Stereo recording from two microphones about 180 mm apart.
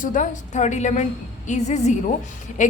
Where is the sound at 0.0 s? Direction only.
45° left (ahead or behind).